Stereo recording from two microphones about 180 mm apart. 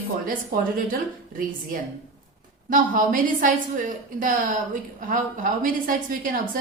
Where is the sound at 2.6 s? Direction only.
50° right (ahead or behind).